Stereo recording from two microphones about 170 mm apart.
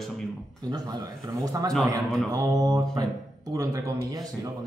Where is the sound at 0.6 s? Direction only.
25° right (ahead or behind).